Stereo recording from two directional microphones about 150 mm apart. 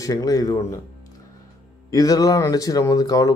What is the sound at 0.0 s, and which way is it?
Speech, 25° left (ahead or behind).